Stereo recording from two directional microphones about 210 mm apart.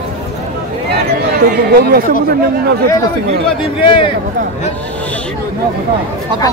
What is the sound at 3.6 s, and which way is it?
Speech, 25° left (ahead or behind).